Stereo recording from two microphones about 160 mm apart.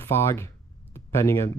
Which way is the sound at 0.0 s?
15° left (ahead or behind).